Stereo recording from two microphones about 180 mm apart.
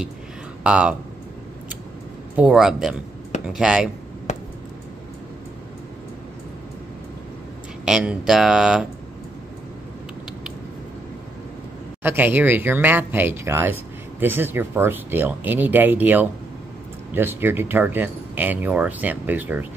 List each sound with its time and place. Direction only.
0.7 s speech: 5° right (ahead or behind)
2.3 s speech: 5° right (ahead or behind)
4.3 s a sound: 40° left (ahead or behind)
7.8 s speech: 5° right (ahead or behind)
12.0 s speech: 10° right (ahead or behind)